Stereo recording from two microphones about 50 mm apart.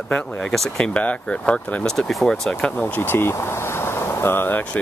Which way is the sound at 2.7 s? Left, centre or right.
Left.